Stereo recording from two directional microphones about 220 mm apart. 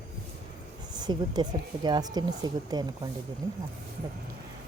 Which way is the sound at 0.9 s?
20° right (ahead or behind).